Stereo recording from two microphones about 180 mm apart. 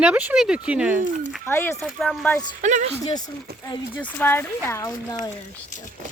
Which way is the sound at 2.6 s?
45° right (ahead or behind).